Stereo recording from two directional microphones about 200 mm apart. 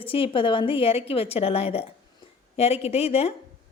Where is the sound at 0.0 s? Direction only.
25° left (ahead or behind).